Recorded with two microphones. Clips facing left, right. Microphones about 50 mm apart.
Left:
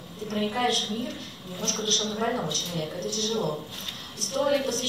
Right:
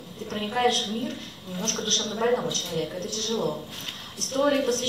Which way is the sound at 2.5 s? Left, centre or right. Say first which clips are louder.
Right 2 dB; right.